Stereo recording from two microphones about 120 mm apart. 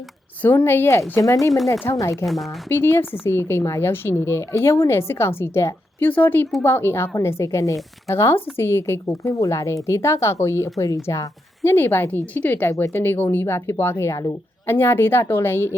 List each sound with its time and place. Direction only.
0.4 s speech: 15° left (ahead or behind)
2.2 s speech: centre (ahead or behind)
2.6 s speech: 20° left (ahead or behind)